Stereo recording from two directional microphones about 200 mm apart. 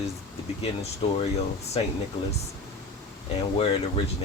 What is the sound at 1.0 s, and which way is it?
Speech, 30° left (ahead or behind).